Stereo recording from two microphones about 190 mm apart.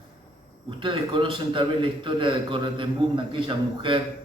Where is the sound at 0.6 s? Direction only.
25° right (ahead or behind).